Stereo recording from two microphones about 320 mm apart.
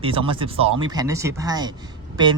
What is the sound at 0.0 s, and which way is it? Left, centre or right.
Speech, centre.